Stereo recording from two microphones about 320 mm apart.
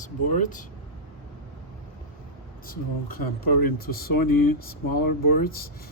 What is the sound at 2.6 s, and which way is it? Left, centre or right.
Speech, left.